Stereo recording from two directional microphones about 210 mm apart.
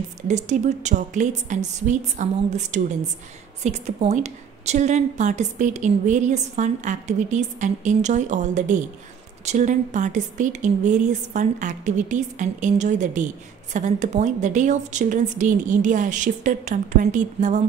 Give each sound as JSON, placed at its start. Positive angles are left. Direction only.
{"t": 0.3, "sound": "a woman's voice", "side_deg": -35}